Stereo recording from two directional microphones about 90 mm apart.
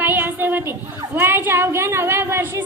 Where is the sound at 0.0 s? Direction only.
20° right (ahead or behind).